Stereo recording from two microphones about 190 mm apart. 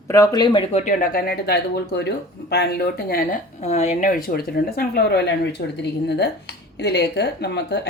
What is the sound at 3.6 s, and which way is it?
Speech, 35° left (ahead or behind).